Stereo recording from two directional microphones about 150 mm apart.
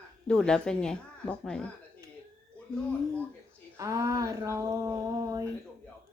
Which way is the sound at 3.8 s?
20° right (ahead or behind).